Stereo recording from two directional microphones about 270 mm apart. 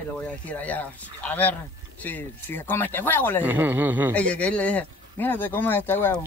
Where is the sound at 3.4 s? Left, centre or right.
Centre.